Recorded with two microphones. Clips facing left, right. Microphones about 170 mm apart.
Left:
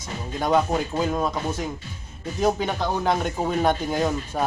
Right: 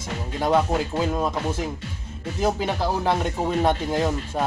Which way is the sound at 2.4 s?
5° right (ahead or behind).